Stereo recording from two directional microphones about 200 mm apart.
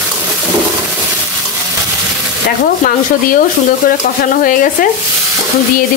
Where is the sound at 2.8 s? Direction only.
45° left (ahead or behind).